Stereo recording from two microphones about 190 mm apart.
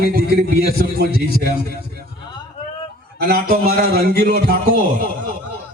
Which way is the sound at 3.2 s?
55° right (ahead or behind).